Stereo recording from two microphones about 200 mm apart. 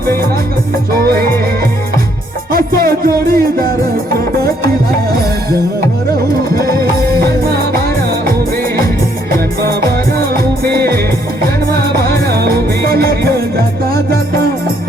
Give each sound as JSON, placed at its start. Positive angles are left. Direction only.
{"t": 0.9, "sound": "music", "side_deg": -50}
{"t": 2.5, "sound": "music", "side_deg": -45}
{"t": 6.6, "sound": "music", "side_deg": -50}
{"t": 9.3, "sound": "music", "side_deg": -50}